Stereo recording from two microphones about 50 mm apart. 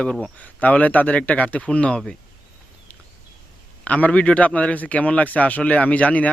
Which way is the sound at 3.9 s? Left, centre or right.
Left.